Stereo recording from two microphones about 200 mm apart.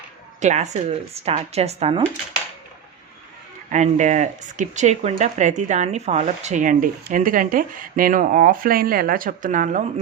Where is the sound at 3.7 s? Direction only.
35° right (ahead or behind).